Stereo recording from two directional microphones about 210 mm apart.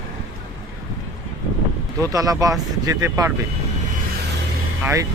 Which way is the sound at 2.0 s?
15° right (ahead or behind).